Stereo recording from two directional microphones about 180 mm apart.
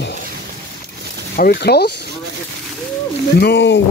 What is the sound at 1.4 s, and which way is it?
Speech, 60° left (ahead or behind).